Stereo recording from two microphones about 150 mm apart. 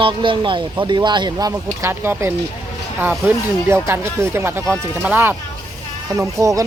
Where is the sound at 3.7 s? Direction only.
15° right (ahead or behind).